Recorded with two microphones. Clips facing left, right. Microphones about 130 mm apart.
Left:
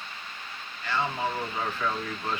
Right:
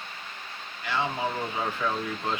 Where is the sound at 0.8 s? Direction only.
15° right (ahead or behind).